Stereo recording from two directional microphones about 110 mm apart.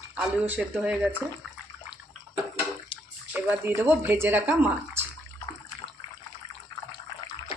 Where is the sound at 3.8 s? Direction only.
20° right (ahead or behind).